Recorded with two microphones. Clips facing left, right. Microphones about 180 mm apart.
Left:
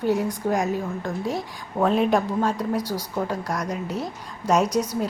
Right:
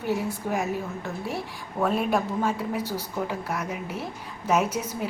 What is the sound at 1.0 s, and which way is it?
Speech, 15° left (ahead or behind).